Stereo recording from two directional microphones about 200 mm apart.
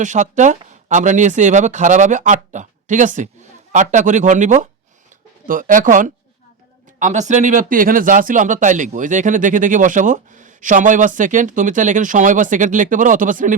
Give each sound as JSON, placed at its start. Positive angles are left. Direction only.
{"t": 0.0, "sound": "speech", "side_deg": -35}